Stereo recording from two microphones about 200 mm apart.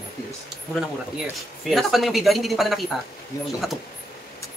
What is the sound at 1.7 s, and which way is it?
A woman's voice, centre (ahead or behind).